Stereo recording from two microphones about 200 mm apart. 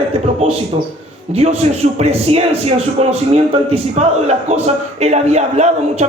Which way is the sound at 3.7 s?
30° right (ahead or behind).